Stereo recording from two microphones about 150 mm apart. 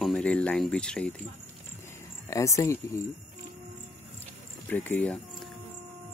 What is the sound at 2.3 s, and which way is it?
Speech, 20° left (ahead or behind).